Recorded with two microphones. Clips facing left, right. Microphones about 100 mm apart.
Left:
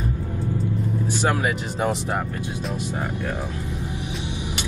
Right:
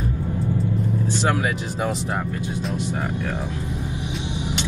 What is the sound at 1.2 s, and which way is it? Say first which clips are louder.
Speech: left 1 dB; 15° left (ahead or behind).